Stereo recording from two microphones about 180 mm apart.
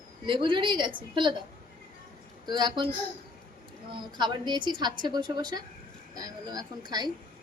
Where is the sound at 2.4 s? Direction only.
25° right (ahead or behind).